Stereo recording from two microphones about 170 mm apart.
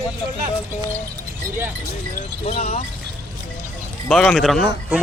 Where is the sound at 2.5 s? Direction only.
40° left (ahead or behind).